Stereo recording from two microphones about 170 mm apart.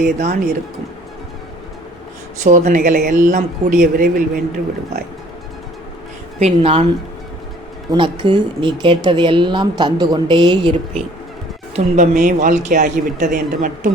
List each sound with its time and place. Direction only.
0.0 s speech: 50° right (ahead or behind)
2.4 s speech: 45° right (ahead or behind)
6.4 s a woman's voice: 35° right (ahead or behind)
7.9 s speech: 25° right (ahead or behind)
11.9 s speech: 45° right (ahead or behind)